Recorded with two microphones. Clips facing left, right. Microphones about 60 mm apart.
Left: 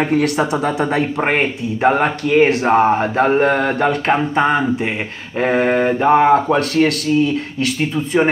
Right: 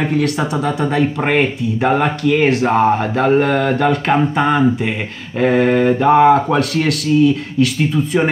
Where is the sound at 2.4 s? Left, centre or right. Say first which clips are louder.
Left 1 dB; centre.